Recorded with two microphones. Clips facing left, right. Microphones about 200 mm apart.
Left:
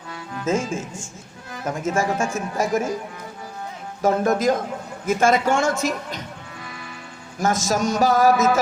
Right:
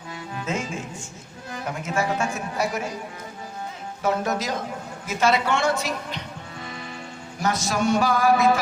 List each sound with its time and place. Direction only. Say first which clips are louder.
0.4 s speech: left 7 dB; 45° left (ahead or behind)
4.0 s speech: left 6 dB; 50° left (ahead or behind)
7.3 s speech: left 3 dB; 45° left (ahead or behind)